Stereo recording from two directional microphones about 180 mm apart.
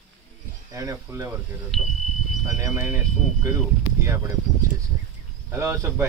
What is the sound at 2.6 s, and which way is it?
Speech, 15° right (ahead or behind).